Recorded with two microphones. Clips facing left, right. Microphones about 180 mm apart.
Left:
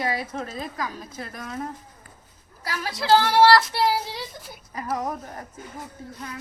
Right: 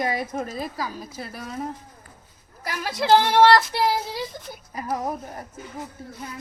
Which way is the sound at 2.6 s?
20° right (ahead or behind).